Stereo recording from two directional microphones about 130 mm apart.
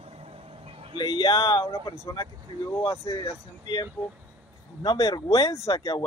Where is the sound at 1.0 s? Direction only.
35° left (ahead or behind).